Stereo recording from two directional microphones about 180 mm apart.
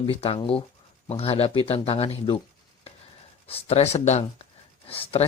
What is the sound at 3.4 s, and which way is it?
Speech, 35° left (ahead or behind).